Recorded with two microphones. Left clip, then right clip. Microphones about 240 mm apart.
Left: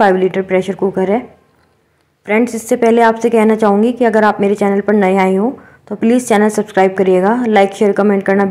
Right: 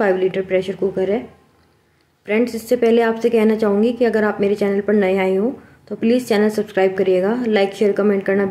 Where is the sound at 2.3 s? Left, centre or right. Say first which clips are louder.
Left 4 dB; centre.